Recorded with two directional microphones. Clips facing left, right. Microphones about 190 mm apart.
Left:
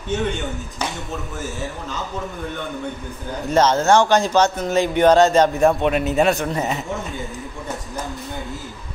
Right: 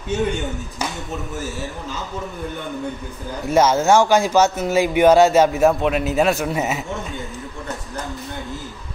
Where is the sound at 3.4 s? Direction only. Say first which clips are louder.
Right 1 dB; 10° right (ahead or behind).